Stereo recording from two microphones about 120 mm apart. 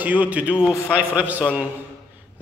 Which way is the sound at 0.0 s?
15° right (ahead or behind).